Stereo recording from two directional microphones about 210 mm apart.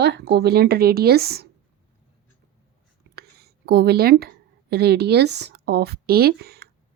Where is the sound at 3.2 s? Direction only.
50° right (ahead or behind).